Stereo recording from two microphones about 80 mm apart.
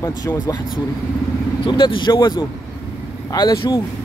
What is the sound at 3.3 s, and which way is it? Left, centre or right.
Speech, left.